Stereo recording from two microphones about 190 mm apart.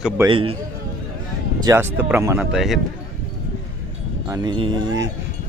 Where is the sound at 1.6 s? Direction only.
10° right (ahead or behind).